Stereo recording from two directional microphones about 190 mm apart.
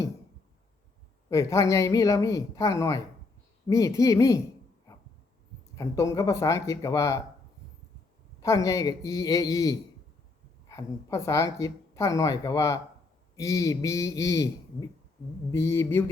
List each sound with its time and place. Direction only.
1.3 s a woman's voice: 15° left (ahead or behind)
5.7 s a woman's voice: 15° left (ahead or behind)
8.4 s a man's voice: 20° left (ahead or behind)